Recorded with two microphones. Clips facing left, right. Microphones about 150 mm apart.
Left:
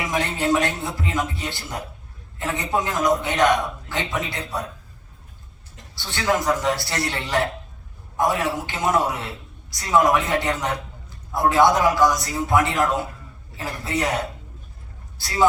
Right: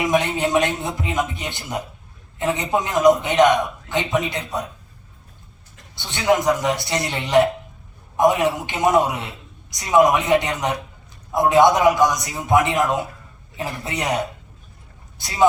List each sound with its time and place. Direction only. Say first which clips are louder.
0.0 s a man's voice: right 4 dB; 20° right (ahead or behind)
6.0 s a man's voice: right 4 dB; 20° right (ahead or behind)
15.2 s a man's voice: right 2 dB; 20° right (ahead or behind)